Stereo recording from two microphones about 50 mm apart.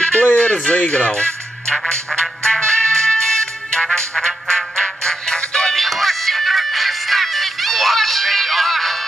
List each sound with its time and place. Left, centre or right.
0.0 s music: centre
0.4 s a sound: left
0.7 s speech: left
2.0 s music: centre
5.8 s music: centre